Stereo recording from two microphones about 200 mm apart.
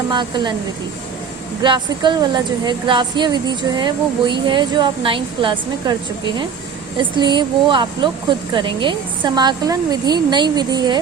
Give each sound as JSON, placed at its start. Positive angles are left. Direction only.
{"t": 0.1, "sound": "speech", "side_deg": -20}
{"t": 1.6, "sound": "speech", "side_deg": -25}
{"t": 7.0, "sound": "speech", "side_deg": -25}